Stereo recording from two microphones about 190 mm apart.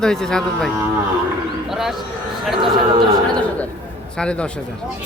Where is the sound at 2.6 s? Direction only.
25° right (ahead or behind).